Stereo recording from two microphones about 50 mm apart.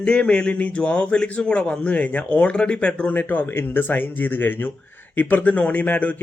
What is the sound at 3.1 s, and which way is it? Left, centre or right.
Speech, left.